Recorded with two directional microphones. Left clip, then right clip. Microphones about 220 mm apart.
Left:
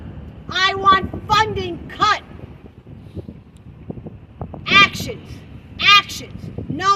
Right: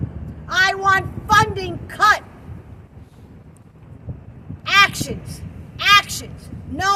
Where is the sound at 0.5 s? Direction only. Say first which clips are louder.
Left 1 dB; 15° right (ahead or behind).